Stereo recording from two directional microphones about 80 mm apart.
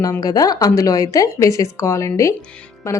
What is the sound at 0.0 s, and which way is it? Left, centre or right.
A woman's voice, left.